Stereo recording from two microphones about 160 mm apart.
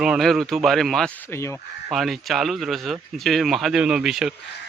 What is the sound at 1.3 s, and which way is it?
Speech, 15° left (ahead or behind).